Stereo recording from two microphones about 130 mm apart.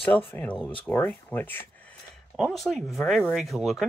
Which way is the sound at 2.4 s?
Centre (ahead or behind).